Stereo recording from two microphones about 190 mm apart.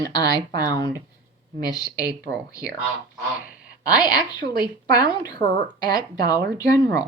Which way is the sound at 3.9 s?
20° left (ahead or behind).